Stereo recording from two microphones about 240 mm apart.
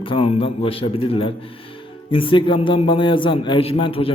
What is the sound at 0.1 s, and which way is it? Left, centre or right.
A man's voice, left.